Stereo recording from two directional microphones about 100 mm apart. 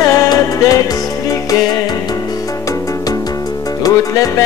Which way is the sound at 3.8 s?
35° left (ahead or behind).